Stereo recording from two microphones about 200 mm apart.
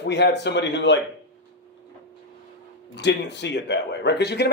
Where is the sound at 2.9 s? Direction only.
60° left (ahead or behind).